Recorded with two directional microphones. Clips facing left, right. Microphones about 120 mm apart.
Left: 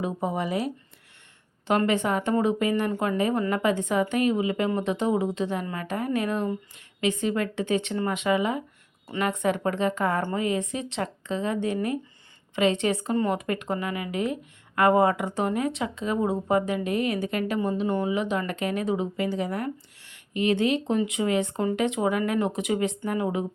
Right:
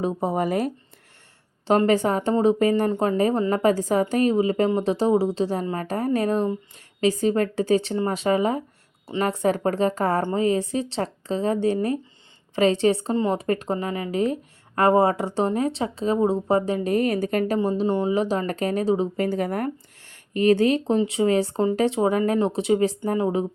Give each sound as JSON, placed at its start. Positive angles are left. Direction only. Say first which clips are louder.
{"t": 0.0, "sound": "speech", "louder": "right 4 dB", "side_deg": -35}
{"t": 1.6, "sound": "speech", "louder": "right 4 dB", "side_deg": -30}